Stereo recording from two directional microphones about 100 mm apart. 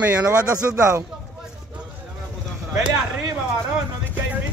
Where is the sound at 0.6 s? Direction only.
25° right (ahead or behind).